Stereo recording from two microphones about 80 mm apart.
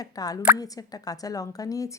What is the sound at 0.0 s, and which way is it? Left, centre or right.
A woman's voice, left.